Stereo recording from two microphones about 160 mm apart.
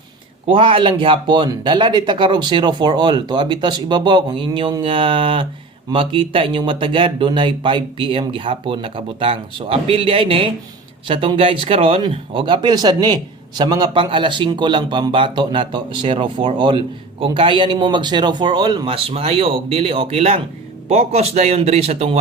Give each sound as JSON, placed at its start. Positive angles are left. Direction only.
{"t": 0.4, "sound": "speech", "side_deg": -35}